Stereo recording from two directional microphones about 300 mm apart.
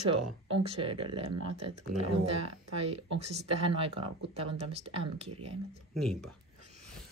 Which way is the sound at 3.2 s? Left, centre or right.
Centre.